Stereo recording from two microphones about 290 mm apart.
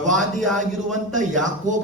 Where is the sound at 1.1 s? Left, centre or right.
Right.